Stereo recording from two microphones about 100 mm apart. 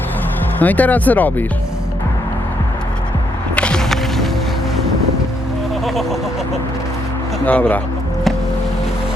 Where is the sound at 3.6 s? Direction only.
10° left (ahead or behind).